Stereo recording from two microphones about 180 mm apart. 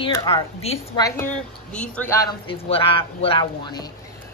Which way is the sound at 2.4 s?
30° left (ahead or behind).